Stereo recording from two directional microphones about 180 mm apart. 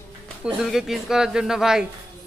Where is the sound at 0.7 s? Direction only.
Centre (ahead or behind).